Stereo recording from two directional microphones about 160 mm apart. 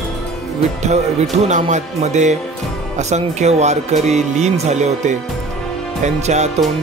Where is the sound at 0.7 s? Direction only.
45° right (ahead or behind).